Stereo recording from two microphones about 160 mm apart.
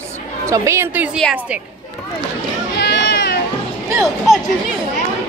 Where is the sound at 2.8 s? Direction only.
90° left.